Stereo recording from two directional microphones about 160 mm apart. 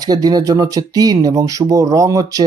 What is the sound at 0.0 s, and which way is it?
Speech, 25° right (ahead or behind).